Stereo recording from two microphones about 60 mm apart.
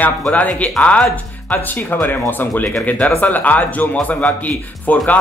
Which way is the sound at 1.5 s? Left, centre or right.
Left.